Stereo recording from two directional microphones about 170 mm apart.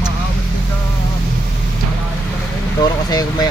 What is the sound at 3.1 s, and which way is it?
Speech, 20° left (ahead or behind).